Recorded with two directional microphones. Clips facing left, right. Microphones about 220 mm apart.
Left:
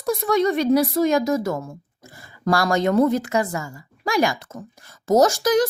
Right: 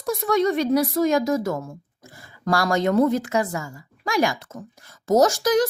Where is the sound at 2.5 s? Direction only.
35° left (ahead or behind).